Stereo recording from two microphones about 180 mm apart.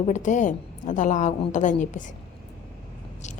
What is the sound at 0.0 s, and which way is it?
Speech, 45° left (ahead or behind).